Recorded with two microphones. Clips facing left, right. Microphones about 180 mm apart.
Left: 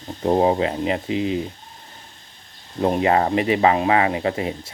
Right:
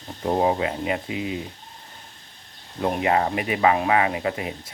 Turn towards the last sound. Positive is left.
turn(degrees=30)  # may be behind; listen again after turning